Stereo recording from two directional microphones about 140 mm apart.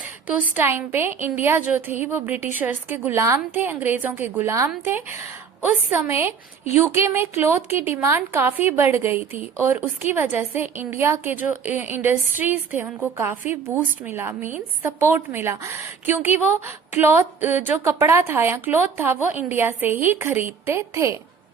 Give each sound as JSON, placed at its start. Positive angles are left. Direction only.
{"t": 0.0, "sound": "a woman's voice", "side_deg": -10}